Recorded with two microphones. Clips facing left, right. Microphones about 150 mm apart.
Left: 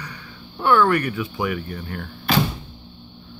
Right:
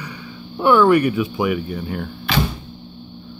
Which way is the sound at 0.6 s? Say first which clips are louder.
Right 5 dB; 15° right (ahead or behind).